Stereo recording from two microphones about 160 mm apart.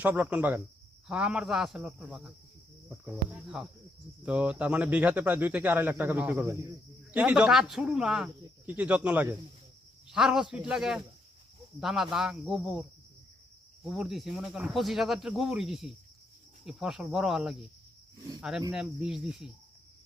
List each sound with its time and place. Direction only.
0.0 s speech: 10° right (ahead or behind)
13.8 s speech: centre (ahead or behind)
18.7 s speech: 5° right (ahead or behind)